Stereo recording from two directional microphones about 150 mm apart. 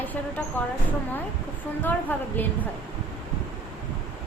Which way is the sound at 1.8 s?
10° left (ahead or behind).